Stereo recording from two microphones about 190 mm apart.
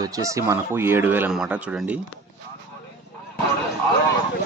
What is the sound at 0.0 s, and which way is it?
Speech, 15° right (ahead or behind).